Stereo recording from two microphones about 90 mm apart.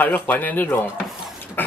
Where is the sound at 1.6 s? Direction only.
20° left (ahead or behind).